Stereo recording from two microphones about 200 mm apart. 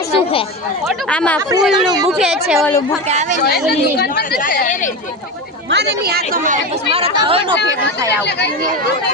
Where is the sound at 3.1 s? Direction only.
35° right (ahead or behind).